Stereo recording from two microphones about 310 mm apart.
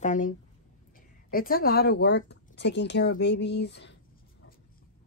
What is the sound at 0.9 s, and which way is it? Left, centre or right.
Speech, left.